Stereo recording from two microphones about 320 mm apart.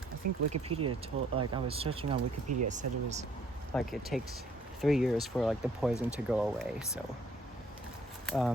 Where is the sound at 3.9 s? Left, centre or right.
Centre.